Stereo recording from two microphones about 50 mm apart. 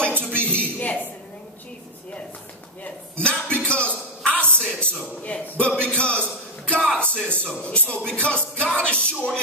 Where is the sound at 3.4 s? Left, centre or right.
Left.